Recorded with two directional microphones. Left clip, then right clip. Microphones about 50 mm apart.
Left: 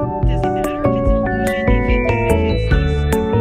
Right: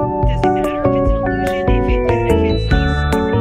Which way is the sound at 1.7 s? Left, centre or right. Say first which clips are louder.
Right 1 dB; right.